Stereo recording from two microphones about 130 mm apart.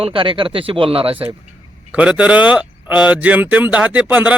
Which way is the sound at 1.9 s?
10° right (ahead or behind).